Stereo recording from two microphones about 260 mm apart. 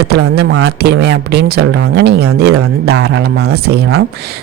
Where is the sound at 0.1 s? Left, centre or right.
Right.